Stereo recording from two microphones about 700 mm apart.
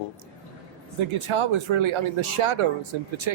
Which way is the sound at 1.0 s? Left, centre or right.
Right.